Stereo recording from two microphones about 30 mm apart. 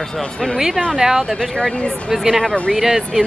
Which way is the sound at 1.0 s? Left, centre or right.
Centre.